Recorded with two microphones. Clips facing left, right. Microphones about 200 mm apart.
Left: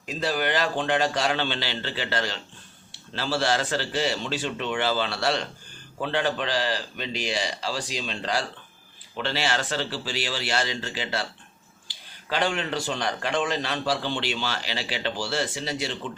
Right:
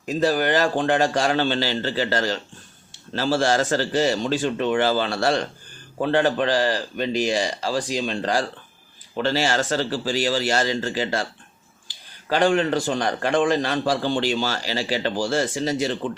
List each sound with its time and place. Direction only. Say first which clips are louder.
0.0 s a man's voice: right 6 dB; 45° right (ahead or behind)
12.3 s a man's voice: right 7 dB; 45° right (ahead or behind)